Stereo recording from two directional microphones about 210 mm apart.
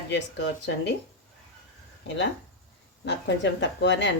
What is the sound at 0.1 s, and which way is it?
Speech, 55° left (ahead or behind).